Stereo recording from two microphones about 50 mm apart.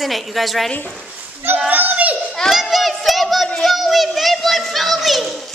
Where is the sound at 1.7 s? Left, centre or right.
Right.